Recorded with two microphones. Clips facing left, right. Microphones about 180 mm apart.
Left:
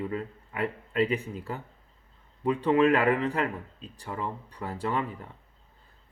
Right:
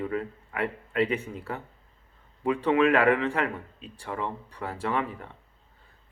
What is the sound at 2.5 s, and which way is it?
Speech, 35° left (ahead or behind).